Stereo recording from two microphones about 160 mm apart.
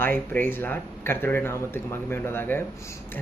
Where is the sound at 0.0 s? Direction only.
10° left (ahead or behind).